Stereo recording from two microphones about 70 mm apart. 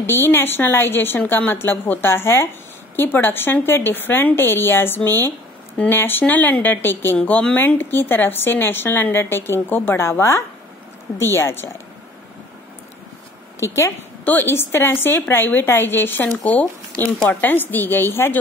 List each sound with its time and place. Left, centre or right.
0.0 s a woman's voice: left
13.6 s a woman's voice: left
14.2 s a woman's voice: left